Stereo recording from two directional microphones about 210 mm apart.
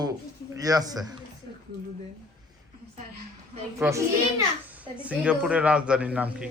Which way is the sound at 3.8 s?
15° right (ahead or behind).